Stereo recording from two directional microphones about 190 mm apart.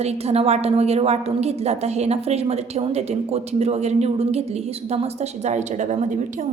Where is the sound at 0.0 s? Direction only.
35° right (ahead or behind).